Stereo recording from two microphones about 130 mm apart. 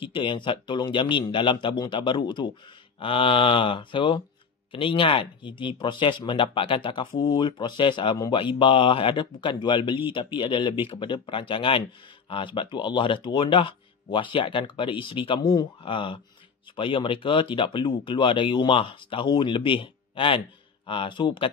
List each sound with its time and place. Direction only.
0.0 s speech: 40° left (ahead or behind)